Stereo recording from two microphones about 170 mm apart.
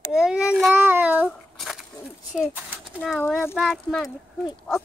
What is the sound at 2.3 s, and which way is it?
A child's voice, 10° right (ahead or behind).